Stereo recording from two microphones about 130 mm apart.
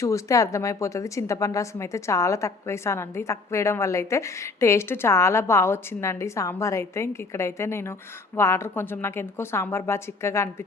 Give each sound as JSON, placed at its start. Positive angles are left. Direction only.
{"t": 0.0, "sound": "a woman's voice", "side_deg": 25}